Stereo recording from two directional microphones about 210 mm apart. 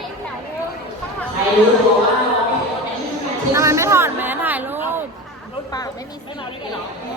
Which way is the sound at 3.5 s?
15° right (ahead or behind).